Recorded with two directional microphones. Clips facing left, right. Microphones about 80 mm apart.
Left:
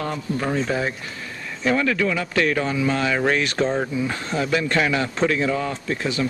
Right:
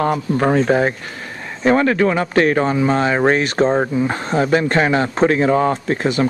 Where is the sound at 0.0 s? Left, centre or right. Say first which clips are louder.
Right 8 dB; right.